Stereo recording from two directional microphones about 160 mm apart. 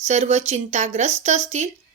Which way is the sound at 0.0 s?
45° right (ahead or behind).